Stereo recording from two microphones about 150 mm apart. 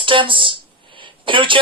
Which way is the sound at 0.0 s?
35° right (ahead or behind).